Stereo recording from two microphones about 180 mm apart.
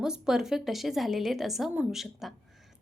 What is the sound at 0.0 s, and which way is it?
A woman's voice, 5° right (ahead or behind).